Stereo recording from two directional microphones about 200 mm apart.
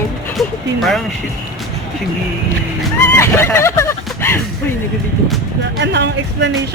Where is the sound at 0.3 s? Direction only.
Centre (ahead or behind).